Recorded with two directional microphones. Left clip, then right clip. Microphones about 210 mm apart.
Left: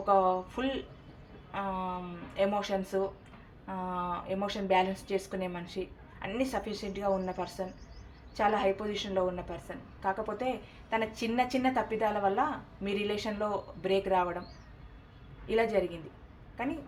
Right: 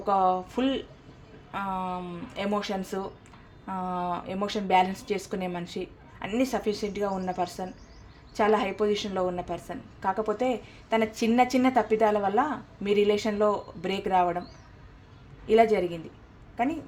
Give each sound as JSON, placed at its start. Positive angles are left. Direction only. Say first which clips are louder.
{"t": 0.0, "sound": "a woman's voice", "louder": "right 2 dB", "side_deg": -55}
{"t": 15.4, "sound": "a woman's voice", "louder": "right 8 dB", "side_deg": -55}